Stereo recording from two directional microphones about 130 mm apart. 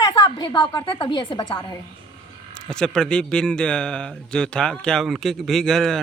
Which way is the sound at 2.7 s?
5° left (ahead or behind).